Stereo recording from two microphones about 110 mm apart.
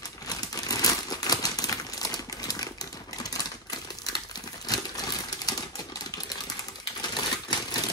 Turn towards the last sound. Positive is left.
turn(degrees=40)  # may be behind; listen again after turning